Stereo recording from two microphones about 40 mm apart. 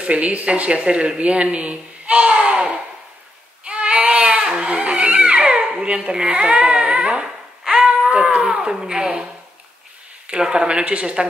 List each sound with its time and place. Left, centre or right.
0.0 s a child's voice: right
0.7 s a child's voice: right
3.6 s baby cry: right
4.5 s a sound: right
5.8 s speech: right
7.6 s a sound: right
8.1 s speech: right
10.4 s speech: centre